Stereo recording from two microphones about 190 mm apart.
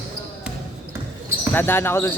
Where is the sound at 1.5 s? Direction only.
10° left (ahead or behind).